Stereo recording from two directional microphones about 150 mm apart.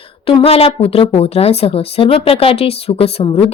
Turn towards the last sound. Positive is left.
turn(degrees=40)  # may be behind; listen again after turning